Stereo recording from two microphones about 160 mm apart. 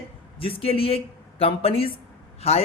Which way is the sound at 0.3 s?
35° left (ahead or behind).